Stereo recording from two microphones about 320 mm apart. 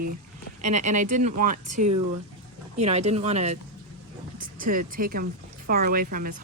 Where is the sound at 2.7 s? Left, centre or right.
Centre.